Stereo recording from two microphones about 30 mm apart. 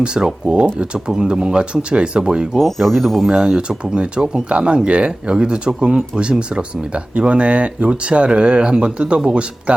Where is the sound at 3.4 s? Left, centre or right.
Right.